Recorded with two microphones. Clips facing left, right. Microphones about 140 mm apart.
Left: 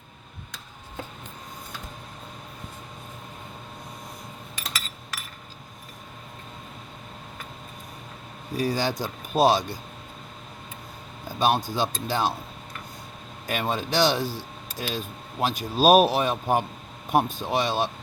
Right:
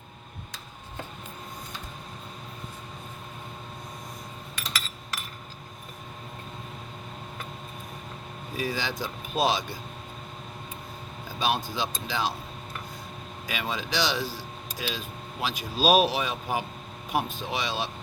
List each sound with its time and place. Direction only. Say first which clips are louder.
8.5 s speech: left 5 dB; 40° left (ahead or behind)
11.3 s speech: left 5 dB; 45° left (ahead or behind)
13.5 s speech: left 5 dB; 50° left (ahead or behind)